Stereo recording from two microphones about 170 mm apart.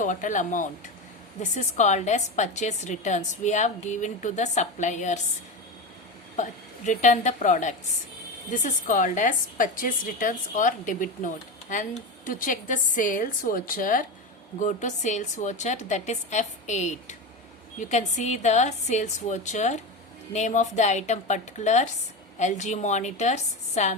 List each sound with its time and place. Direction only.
0.0 s a woman's voice: 50° left (ahead or behind)
6.3 s a woman's voice: 45° left (ahead or behind)